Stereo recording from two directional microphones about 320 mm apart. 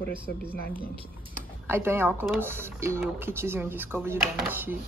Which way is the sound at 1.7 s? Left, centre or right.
Centre.